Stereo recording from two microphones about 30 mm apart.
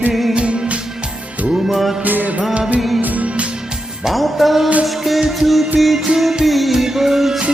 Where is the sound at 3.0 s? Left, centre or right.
Right.